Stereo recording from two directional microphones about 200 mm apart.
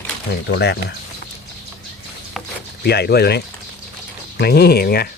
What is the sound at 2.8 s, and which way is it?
Speech, 55° left (ahead or behind).